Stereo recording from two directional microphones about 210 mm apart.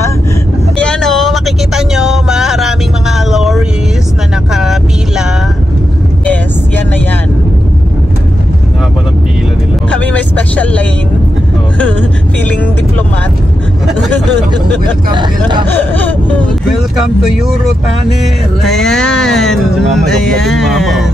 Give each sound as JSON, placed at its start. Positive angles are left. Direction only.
{"t": 0.7, "sound": "vehicle", "side_deg": 5}
{"t": 9.8, "sound": "vehicle", "side_deg": 5}
{"t": 15.0, "sound": "hubbub", "side_deg": -20}
{"t": 16.0, "sound": "vehicle", "side_deg": 5}
{"t": 18.2, "sound": "music", "side_deg": 0}